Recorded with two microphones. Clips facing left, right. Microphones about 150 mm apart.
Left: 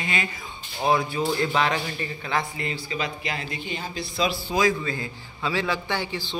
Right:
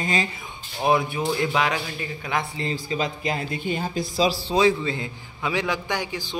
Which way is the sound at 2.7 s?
40° right (ahead or behind).